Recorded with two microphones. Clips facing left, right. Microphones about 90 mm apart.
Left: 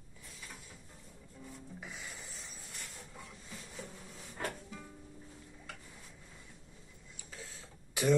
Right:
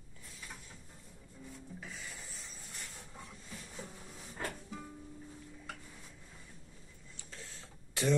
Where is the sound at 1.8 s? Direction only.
10° left (ahead or behind).